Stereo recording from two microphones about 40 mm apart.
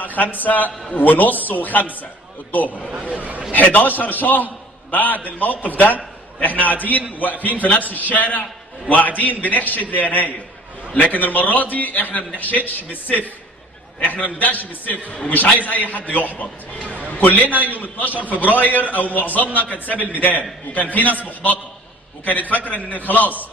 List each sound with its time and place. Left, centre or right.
0.0 s a man's voice: left
3.1 s speech: right
3.5 s a man's voice: left
14.0 s a man's voice: left